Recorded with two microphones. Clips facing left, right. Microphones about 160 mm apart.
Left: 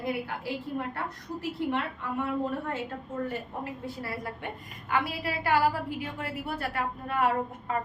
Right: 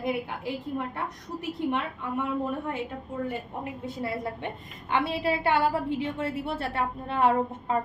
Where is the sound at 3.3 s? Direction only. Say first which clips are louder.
Right 1 dB; 20° right (ahead or behind).